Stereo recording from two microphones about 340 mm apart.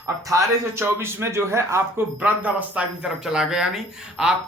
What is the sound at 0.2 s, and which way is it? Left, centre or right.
A man's voice, centre.